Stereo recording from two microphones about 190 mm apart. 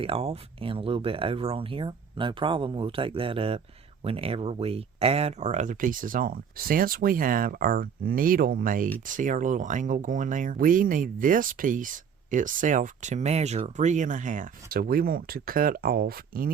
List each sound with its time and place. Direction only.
0.0 s speech: 30° right (ahead or behind); by 16.5 s 50° right (ahead or behind)